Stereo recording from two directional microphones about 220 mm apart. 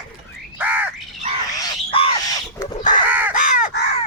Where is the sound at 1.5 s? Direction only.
20° left (ahead or behind).